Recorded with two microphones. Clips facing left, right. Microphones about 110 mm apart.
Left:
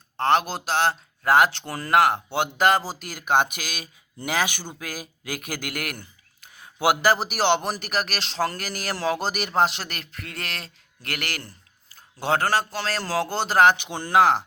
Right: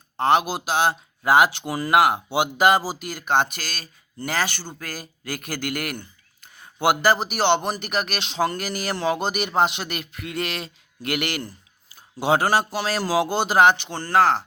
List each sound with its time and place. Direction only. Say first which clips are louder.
0.2 s a man's voice: right 2 dB; 5° right (ahead or behind)
13.8 s speech: even; 10° left (ahead or behind)